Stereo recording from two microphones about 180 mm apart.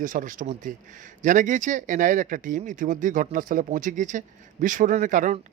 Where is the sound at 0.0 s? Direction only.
45° right (ahead or behind).